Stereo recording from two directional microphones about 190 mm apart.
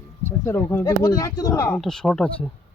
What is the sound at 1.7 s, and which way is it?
Speech, 5° left (ahead or behind).